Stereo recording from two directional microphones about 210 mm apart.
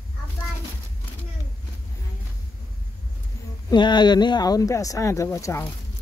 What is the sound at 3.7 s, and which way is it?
Speech, 20° left (ahead or behind).